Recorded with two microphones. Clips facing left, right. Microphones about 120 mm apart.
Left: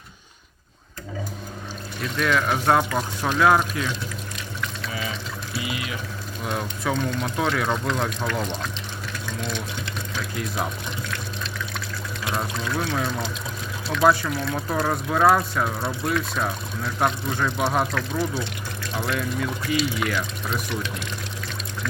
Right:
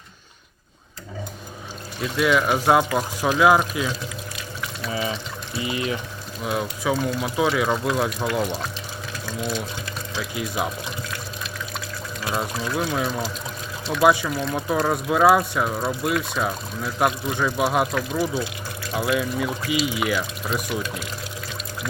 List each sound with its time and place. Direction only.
2.0 s speech: 5° right (ahead or behind)
4.9 s water: 30° right (ahead or behind)
5.5 s speech: 30° right (ahead or behind)
6.4 s speech: 5° right (ahead or behind)
10.2 s speech: 5° right (ahead or behind)
12.2 s speech: 5° right (ahead or behind)